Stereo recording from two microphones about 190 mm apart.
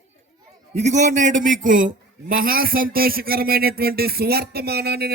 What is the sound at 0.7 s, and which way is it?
A man's voice, 35° right (ahead or behind).